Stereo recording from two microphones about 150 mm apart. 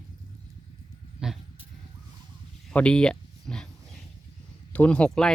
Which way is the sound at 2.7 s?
5° left (ahead or behind).